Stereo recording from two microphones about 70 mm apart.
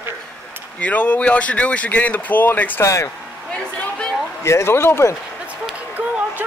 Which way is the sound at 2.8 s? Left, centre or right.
Left.